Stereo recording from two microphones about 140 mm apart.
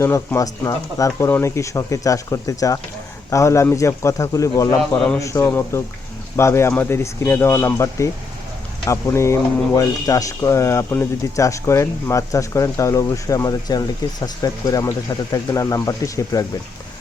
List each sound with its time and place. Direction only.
0.0 s speech: 20° left (ahead or behind)
4.8 s a man's voice: 5° left (ahead or behind)
5.1 s speech: 20° left (ahead or behind)